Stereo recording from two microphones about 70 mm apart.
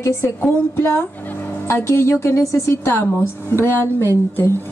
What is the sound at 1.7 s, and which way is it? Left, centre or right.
A woman's voice, left.